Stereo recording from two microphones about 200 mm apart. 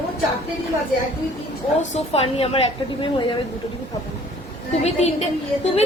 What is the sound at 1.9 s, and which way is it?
A woman's voice, 30° left (ahead or behind).